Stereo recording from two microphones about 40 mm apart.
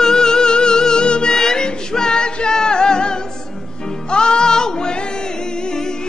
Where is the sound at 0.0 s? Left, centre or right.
Centre.